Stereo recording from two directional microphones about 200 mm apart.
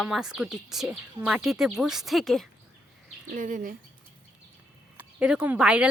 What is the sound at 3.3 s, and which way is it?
Speech, 40° right (ahead or behind).